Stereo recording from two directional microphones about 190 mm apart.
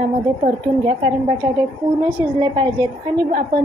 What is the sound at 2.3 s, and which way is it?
Speech, 25° right (ahead or behind).